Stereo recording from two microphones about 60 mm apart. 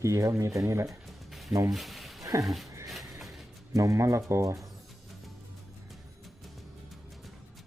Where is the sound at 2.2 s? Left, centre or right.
Right.